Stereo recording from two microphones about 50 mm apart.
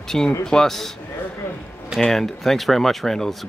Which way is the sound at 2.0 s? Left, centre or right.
Centre.